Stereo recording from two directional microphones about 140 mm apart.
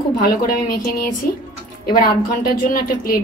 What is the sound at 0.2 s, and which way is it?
Speech, 90° left.